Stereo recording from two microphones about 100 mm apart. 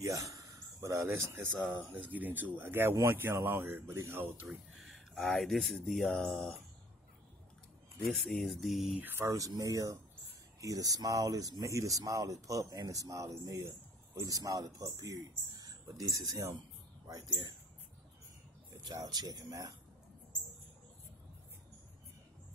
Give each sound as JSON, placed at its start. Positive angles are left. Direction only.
{"t": 0.0, "sound": "speech", "side_deg": -35}
{"t": 4.8, "sound": "a sound", "side_deg": 0}
{"t": 5.8, "sound": "speech", "side_deg": 10}
{"t": 8.1, "sound": "speech", "side_deg": 0}
{"t": 8.9, "sound": "speech", "side_deg": -20}
{"t": 9.2, "sound": "speech", "side_deg": -35}
{"t": 18.9, "sound": "speech", "side_deg": -40}